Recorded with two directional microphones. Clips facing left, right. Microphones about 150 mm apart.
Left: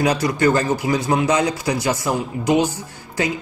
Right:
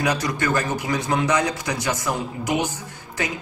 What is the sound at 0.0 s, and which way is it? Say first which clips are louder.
A man's voice: left 6 dB; 30° left (ahead or behind).